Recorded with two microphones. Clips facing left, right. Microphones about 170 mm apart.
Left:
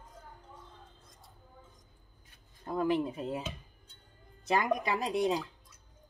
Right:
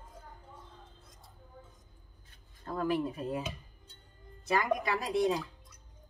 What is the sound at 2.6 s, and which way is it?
Speech, 15° left (ahead or behind).